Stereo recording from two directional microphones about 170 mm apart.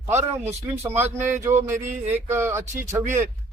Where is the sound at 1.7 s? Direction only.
45° right (ahead or behind).